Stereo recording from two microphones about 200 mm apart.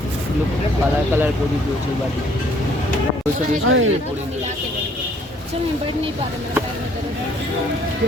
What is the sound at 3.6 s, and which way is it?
Speech, 75° right (ahead or behind).